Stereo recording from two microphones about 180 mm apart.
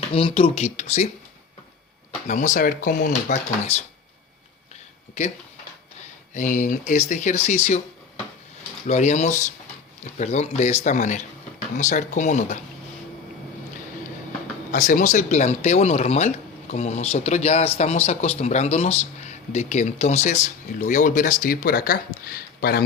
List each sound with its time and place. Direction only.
0.1 s speech: 30° left (ahead or behind)
2.2 s speech: 45° left (ahead or behind)
6.0 s speech: 45° left (ahead or behind)
14.7 s speech: 45° left (ahead or behind)